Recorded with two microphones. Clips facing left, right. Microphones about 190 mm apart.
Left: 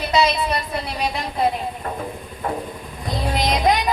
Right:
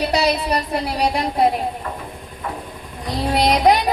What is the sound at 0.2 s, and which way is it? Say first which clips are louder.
Speech: even; 40° right (ahead or behind).